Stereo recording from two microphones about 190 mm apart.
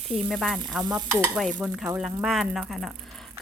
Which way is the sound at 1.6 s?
5° right (ahead or behind).